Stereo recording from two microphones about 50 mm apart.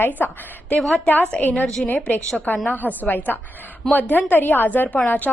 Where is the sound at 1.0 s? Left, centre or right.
Left.